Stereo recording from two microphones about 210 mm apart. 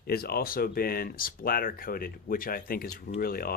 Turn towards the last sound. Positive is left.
turn(degrees=45)  # may be behind; listen again after turning